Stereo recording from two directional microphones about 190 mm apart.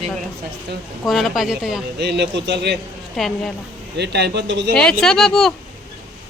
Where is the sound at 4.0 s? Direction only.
60° right (ahead or behind).